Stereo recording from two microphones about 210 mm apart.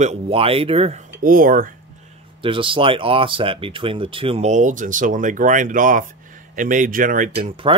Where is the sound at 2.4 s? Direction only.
25° right (ahead or behind).